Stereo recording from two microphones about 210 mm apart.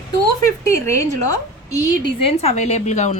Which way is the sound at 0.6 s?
15° left (ahead or behind).